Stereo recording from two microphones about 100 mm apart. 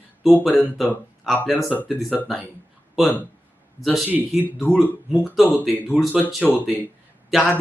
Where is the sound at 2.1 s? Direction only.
5° right (ahead or behind).